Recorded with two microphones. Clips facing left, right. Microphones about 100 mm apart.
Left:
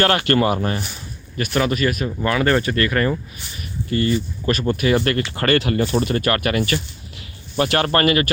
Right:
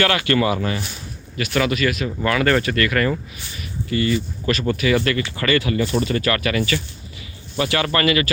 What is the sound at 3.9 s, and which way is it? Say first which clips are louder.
Speech: left 1 dB; 40° left (ahead or behind).